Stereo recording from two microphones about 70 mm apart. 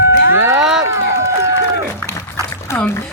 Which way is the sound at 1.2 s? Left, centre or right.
Right.